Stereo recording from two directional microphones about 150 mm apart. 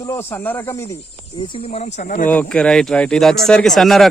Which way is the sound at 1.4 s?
40° left (ahead or behind).